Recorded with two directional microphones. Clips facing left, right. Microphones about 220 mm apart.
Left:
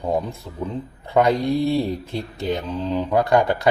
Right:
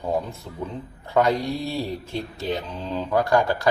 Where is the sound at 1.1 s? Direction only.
15° left (ahead or behind).